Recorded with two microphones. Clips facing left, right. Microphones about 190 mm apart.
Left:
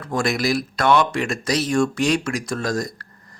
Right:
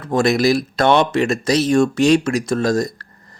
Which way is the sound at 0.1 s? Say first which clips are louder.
Right 6 dB; 25° right (ahead or behind).